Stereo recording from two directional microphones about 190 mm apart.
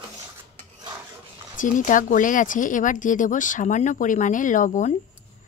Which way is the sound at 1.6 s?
45° left (ahead or behind).